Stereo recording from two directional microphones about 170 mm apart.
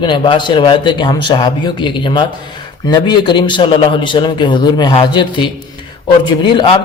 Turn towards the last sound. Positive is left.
turn(degrees=30)  # may be behind; listen again after turning